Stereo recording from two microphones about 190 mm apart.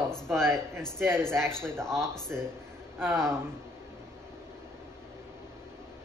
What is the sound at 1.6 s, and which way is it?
Speech, 5° left (ahead or behind).